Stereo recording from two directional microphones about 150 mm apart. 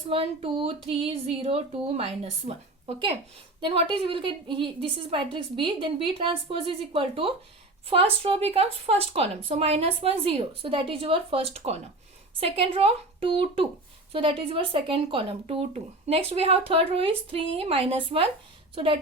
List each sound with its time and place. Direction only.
0.1 s speech: 35° right (ahead or behind)